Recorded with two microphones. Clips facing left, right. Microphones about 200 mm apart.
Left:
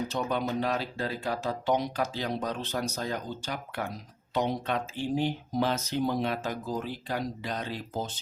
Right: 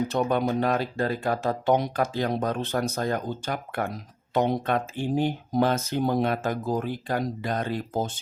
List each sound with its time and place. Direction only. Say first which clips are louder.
0.1 s speech: right 6 dB; 55° right (ahead or behind)